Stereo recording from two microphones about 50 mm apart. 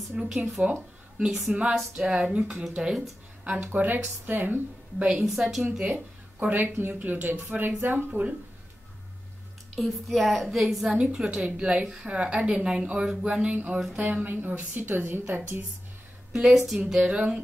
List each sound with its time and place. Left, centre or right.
0.1 s speech: centre
0.6 s a woman's voice: right
1.1 s a woman's voice: centre
3.6 s a woman's voice: right
5.1 s speech: centre
5.7 s a woman's voice: right
6.4 s a woman's voice: right
8.1 s a woman's voice: right
9.8 s a woman's voice: centre
10.9 s a woman's voice: centre
13.4 s a woman's voice: right
14.2 s a woman's voice: right
16.3 s speech: centre
17.0 s a woman's voice: right